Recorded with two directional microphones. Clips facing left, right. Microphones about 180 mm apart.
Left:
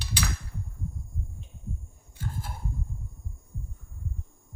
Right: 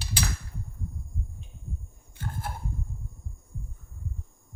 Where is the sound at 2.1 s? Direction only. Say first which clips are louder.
Right 1 dB; 65° right (ahead or behind).